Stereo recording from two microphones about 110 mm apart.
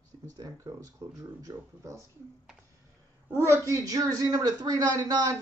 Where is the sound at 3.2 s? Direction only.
25° right (ahead or behind).